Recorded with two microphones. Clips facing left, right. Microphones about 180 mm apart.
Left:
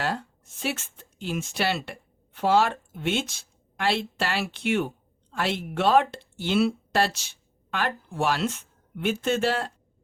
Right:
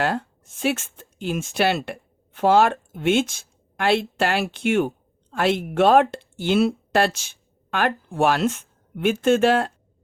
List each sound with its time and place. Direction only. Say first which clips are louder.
0.6 s a woman's voice: right 7 dB; 50° right (ahead or behind)